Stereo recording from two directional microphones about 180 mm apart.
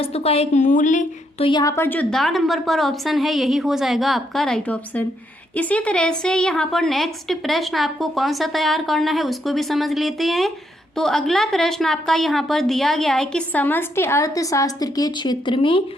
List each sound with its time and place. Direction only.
0.0 s a woman's voice: 35° left (ahead or behind)
1.5 s a woman's voice: 20° left (ahead or behind)